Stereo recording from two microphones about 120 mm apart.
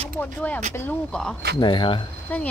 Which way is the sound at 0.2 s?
15° left (ahead or behind).